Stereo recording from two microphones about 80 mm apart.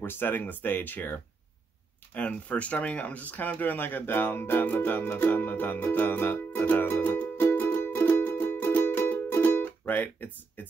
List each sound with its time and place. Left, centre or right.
0.0 s speech: left